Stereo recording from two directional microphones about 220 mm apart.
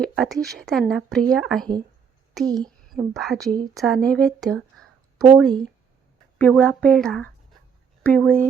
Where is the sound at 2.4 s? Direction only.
15° right (ahead or behind).